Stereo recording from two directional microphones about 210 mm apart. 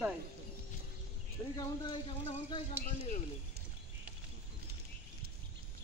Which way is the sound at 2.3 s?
25° left (ahead or behind).